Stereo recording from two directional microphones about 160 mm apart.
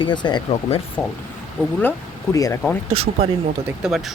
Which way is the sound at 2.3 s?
20° left (ahead or behind).